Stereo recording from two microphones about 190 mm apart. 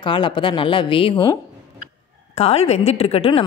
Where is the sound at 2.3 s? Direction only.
35° left (ahead or behind).